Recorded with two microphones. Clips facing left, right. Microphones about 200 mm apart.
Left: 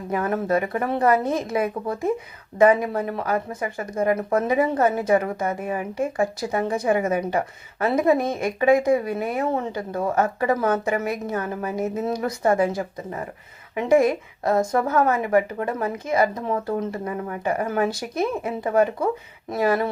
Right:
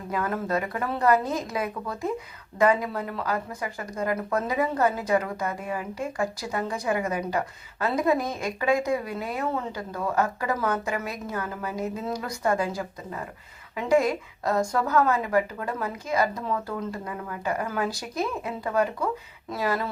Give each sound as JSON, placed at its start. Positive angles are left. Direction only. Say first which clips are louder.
{"t": 0.1, "sound": "speech", "louder": "left 5 dB", "side_deg": 25}
{"t": 13.7, "sound": "speech", "louder": "left 4 dB", "side_deg": 30}